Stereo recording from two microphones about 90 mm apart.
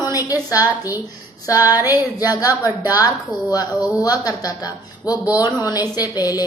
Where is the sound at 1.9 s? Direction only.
45° left (ahead or behind).